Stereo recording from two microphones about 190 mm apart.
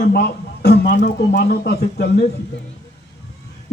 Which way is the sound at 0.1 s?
55° left (ahead or behind).